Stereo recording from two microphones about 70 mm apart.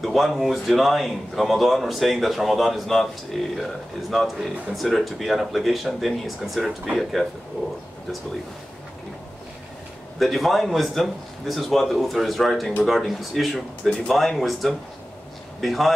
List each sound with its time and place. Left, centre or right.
0.0 s speech: centre
10.1 s speech: centre